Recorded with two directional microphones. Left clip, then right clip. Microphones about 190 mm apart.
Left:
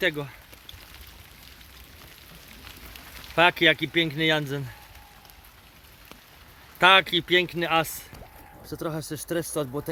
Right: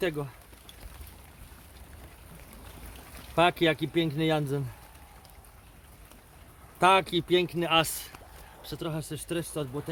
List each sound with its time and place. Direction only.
0.0 s speech: centre (ahead or behind)
3.3 s speech: centre (ahead or behind)
6.7 s speech: 5° right (ahead or behind); by 8.1 s 10° left (ahead or behind)
8.6 s speech: 25° left (ahead or behind)